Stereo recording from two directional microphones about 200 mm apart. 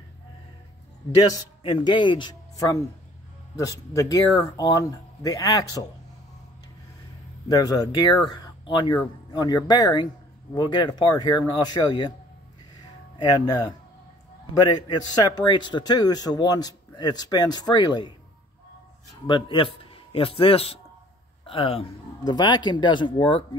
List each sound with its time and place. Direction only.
1.2 s a man's voice: 20° left (ahead or behind)
7.4 s a man's voice: 20° left (ahead or behind)
13.5 s a man's voice: 20° left (ahead or behind)
19.2 s a man's voice: 25° left (ahead or behind)